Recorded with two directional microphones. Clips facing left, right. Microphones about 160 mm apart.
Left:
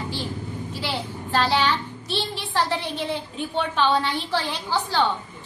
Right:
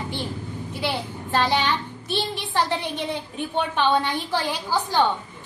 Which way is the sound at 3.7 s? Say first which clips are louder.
Even; 15° right (ahead or behind).